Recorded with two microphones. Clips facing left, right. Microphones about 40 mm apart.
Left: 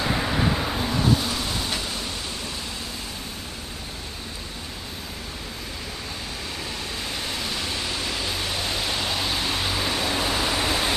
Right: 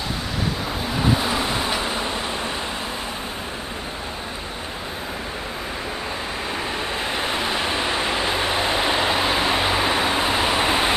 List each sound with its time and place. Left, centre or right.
0.0 s vehicle: left
0.7 s vehicle: centre
0.9 s vehicle: right
7.1 s vehicle: right